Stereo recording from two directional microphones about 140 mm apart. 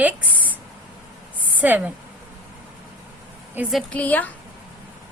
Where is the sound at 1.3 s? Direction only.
10° right (ahead or behind).